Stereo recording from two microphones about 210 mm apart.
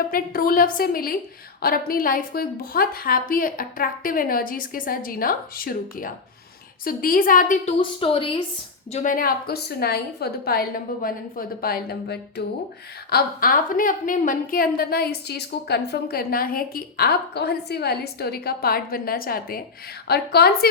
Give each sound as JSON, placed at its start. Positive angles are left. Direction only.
{"t": 0.1, "sound": "a woman's voice", "side_deg": 45}
{"t": 7.8, "sound": "a woman's voice", "side_deg": 25}
{"t": 8.9, "sound": "a woman's voice", "side_deg": 35}